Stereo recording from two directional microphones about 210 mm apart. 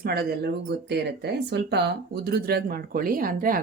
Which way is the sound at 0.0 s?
50° right (ahead or behind).